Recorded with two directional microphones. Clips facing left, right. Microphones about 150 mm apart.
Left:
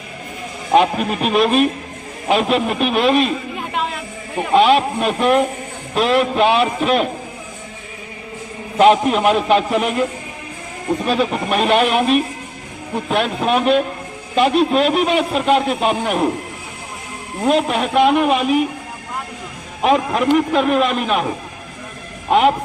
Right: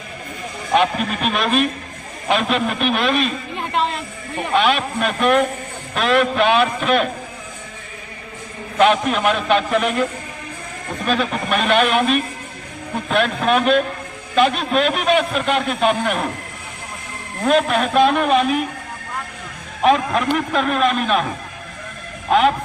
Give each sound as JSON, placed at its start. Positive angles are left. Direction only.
{"t": 0.8, "sound": "a man's voice", "side_deg": 25}
{"t": 3.7, "sound": "a sound", "side_deg": 5}
{"t": 4.5, "sound": "a man's voice", "side_deg": 30}
{"t": 8.8, "sound": "a man's voice", "side_deg": 25}
{"t": 17.4, "sound": "a woman's voice", "side_deg": 20}
{"t": 19.8, "sound": "a man's voice", "side_deg": 20}
{"t": 22.3, "sound": "speech", "side_deg": 20}